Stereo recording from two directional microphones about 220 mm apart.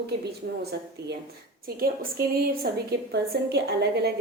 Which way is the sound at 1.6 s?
45° right (ahead or behind).